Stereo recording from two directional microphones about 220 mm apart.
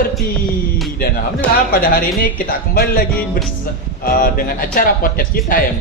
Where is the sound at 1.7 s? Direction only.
40° left (ahead or behind).